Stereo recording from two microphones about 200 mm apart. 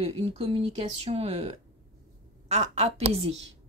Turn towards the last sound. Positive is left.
turn(degrees=-30)  # may be behind; listen again after turning